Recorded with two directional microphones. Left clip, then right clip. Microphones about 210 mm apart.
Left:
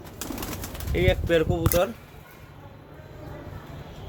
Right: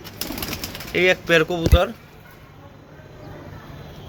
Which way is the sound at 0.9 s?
Centre (ahead or behind).